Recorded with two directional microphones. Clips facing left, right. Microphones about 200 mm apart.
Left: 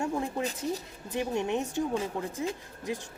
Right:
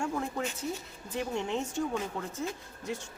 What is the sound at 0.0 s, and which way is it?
A woman's voice, 20° left (ahead or behind).